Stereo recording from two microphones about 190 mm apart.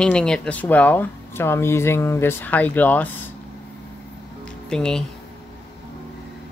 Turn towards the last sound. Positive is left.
turn(degrees=5)  # may be behind; listen again after turning